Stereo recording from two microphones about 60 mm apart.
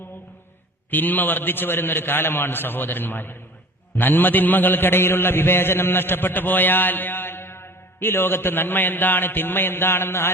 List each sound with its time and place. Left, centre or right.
0.9 s a man's voice: left